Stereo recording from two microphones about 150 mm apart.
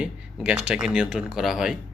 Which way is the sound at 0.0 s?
5° right (ahead or behind).